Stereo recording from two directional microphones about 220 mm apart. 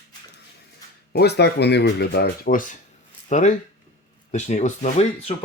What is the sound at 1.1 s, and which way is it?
A man's voice, 45° left (ahead or behind).